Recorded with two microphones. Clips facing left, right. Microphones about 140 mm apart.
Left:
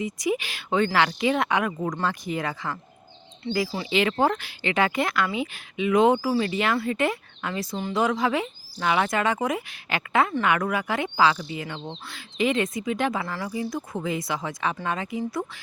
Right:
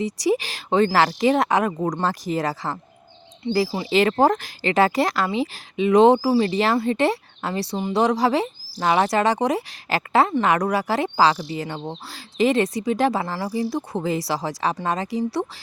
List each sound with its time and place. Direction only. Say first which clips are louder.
0.0 s speech: right 5 dB; 35° right (ahead or behind)